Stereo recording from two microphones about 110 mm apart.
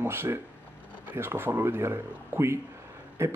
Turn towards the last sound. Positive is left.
turn(degrees=-25)  # may be behind; listen again after turning